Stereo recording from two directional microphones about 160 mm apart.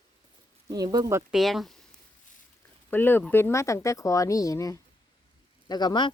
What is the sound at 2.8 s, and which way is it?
Speech, 15° left (ahead or behind).